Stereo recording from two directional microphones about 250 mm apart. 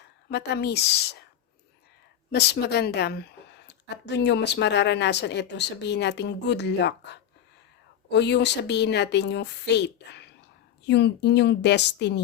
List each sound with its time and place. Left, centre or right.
0.3 s speech: left
2.3 s a woman's voice: left